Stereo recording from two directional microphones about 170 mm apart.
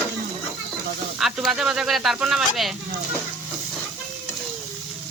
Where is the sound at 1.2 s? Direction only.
Centre (ahead or behind).